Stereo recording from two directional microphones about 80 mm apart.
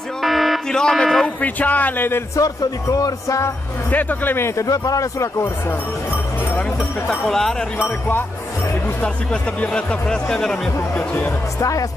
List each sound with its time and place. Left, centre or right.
0.2 s a sound: centre
0.7 s speech: centre
1.2 s speech: centre
2.3 s speech: left
3.9 s speech: left
4.6 s speech: left
7.1 s speech: centre
9.0 s speech: centre